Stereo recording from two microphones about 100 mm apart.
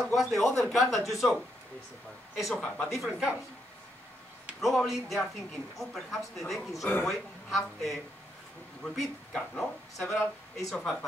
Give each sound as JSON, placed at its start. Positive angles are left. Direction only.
{"t": 0.0, "sound": "speech", "side_deg": 0}
{"t": 4.6, "sound": "speech", "side_deg": 0}